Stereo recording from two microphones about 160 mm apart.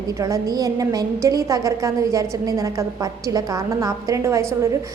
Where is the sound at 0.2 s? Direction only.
20° right (ahead or behind).